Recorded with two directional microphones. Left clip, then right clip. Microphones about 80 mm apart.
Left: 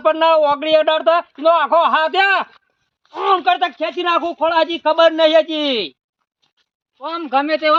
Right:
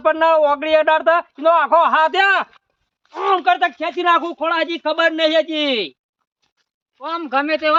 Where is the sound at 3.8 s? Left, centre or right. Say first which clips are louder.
Right 1 dB; right.